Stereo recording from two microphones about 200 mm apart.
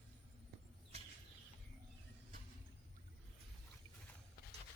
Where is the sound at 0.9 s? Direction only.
30° right (ahead or behind).